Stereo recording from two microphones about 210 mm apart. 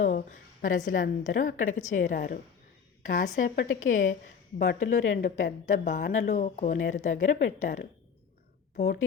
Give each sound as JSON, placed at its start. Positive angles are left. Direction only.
{"t": 0.0, "sound": "a woman's voice", "side_deg": 40}